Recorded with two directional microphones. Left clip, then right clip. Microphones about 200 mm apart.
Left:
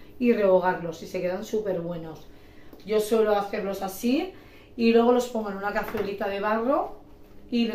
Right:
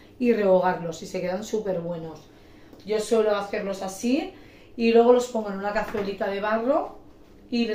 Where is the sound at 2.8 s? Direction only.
5° left (ahead or behind).